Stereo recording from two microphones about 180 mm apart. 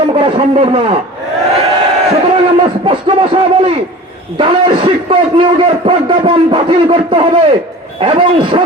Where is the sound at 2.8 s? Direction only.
30° right (ahead or behind).